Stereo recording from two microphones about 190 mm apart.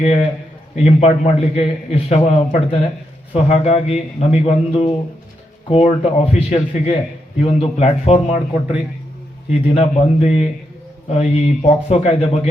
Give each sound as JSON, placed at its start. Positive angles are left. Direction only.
{"t": 0.0, "sound": "a man's voice", "side_deg": 35}
{"t": 9.5, "sound": "a man's voice", "side_deg": 35}